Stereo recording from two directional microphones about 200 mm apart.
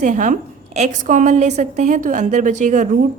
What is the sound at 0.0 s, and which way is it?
A woman's voice, 40° right (ahead or behind).